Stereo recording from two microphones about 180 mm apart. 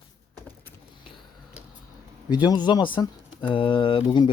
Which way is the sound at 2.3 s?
25° left (ahead or behind).